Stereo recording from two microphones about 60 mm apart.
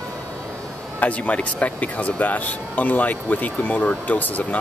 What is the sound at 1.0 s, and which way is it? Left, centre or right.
Speech, left.